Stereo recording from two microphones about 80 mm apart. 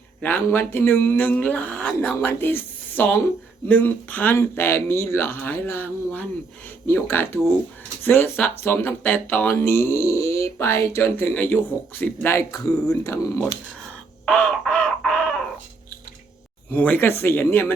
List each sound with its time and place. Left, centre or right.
0.2 s a woman's voice: left
4.4 s speech: left
12.4 s speech: left
14.3 s crow: centre
16.7 s speech: left